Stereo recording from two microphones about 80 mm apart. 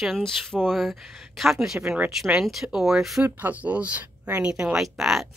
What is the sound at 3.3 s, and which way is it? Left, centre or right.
A woman's voice, right.